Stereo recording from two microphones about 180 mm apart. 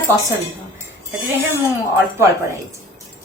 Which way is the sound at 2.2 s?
15° right (ahead or behind).